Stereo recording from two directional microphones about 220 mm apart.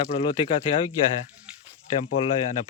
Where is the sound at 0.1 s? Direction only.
25° left (ahead or behind).